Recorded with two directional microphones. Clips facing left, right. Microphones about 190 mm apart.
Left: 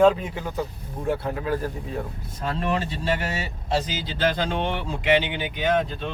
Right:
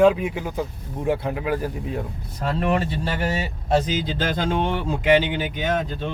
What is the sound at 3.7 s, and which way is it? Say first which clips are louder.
Speech: right 5 dB; 45° right (ahead or behind).